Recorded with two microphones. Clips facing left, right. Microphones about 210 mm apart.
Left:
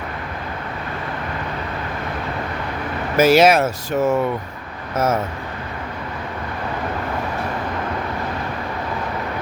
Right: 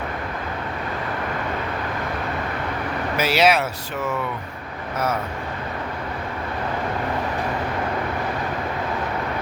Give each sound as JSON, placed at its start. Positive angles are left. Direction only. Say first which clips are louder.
{"t": 3.2, "sound": "speech", "louder": "left 7 dB", "side_deg": 45}